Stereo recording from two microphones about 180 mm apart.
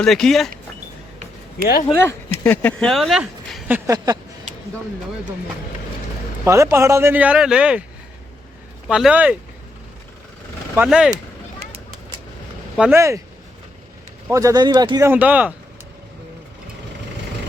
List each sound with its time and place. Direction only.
0.0 s speech: centre (ahead or behind)
1.9 s speech: 10° left (ahead or behind)
3.8 s a sound: 20° right (ahead or behind)
6.4 s speech: 15° right (ahead or behind)
8.9 s speech: 5° right (ahead or behind)
10.8 s speech: 5° right (ahead or behind)
12.7 s speech: 5° right (ahead or behind)
13.0 s speech: 15° right (ahead or behind)
14.3 s speech: 15° right (ahead or behind)